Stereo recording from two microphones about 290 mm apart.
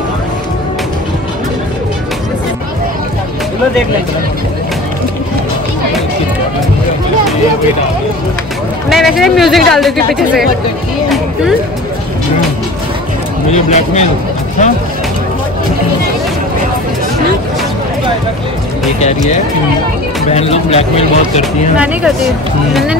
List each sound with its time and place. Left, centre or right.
8.8 s speech: centre
13.5 s speech: left
18.9 s speech: left
21.7 s speech: centre